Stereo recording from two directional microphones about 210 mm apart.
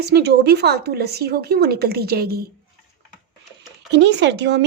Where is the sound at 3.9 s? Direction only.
55° right (ahead or behind).